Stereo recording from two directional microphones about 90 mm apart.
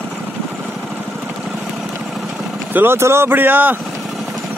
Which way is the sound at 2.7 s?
25° right (ahead or behind).